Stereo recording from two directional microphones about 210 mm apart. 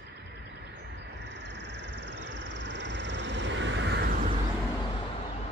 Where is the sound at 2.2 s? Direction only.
55° right (ahead or behind).